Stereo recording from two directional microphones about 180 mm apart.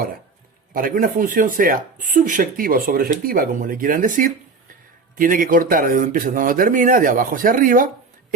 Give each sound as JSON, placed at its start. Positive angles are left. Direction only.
{"t": 0.7, "sound": "speech", "side_deg": -50}